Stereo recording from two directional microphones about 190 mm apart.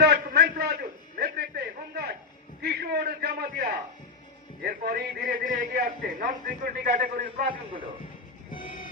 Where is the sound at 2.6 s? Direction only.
60° right (ahead or behind).